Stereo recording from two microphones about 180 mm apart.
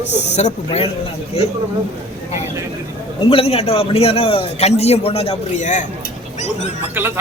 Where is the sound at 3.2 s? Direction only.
30° left (ahead or behind).